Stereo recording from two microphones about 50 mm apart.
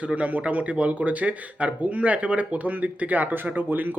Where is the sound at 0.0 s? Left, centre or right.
Right.